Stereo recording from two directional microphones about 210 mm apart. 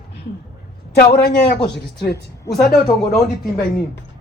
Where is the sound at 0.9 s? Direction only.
50° left (ahead or behind).